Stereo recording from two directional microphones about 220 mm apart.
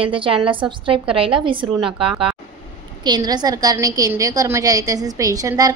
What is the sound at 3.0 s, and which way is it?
A woman's voice, 20° right (ahead or behind).